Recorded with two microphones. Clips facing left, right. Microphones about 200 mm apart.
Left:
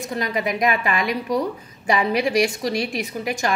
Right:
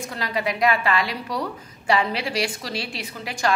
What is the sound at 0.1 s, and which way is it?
A woman's voice, 20° left (ahead or behind).